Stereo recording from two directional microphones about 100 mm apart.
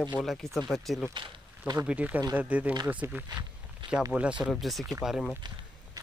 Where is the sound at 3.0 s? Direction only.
25° right (ahead or behind).